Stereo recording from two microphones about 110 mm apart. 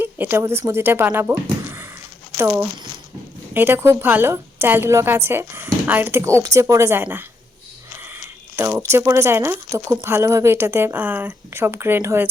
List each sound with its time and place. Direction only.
0.0 s speech: 20° right (ahead or behind)